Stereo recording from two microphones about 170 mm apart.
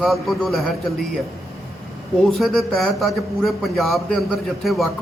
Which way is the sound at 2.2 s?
Centre (ahead or behind).